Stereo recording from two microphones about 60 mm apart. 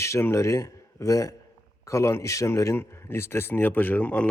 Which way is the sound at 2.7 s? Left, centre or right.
Left.